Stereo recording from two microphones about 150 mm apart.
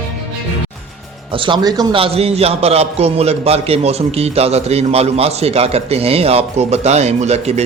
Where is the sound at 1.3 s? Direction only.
35° right (ahead or behind).